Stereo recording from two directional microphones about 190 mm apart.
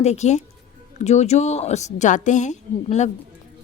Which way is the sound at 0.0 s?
35° left (ahead or behind).